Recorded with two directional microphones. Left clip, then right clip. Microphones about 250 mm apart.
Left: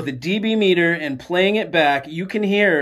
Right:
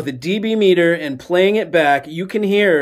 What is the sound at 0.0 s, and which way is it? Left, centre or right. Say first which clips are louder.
Speech: right 2 dB; centre.